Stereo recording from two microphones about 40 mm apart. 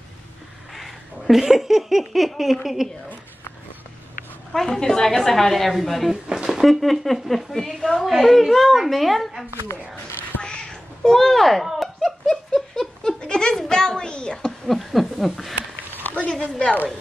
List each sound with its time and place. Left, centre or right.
0.7 s a sound: centre
1.4 s speech: centre
4.5 s a woman's voice: centre
6.2 s speech: centre
6.6 s a woman's voice: centre
10.4 s cat: centre
11.1 s a woman's voice: centre
11.6 s giggle: centre
13.2 s goat: centre
14.7 s a woman's voice: centre